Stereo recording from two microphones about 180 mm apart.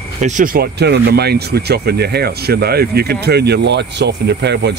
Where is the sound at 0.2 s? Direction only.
45° right (ahead or behind).